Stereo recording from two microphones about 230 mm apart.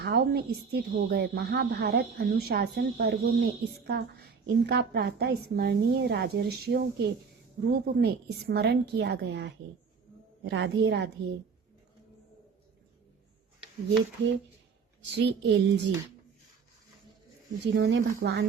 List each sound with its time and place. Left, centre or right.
0.0 s a woman's voice: right
15.1 s a woman's voice: right
17.6 s a woman's voice: right